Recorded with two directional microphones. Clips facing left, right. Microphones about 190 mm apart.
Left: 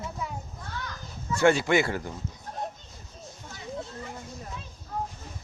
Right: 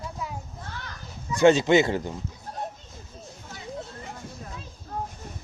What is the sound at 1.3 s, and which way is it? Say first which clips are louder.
Speech: right 4 dB; 20° right (ahead or behind).